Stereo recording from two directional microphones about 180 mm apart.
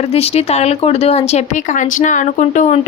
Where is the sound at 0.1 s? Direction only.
35° left (ahead or behind).